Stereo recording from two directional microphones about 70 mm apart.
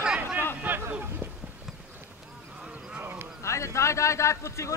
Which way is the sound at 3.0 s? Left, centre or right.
Right.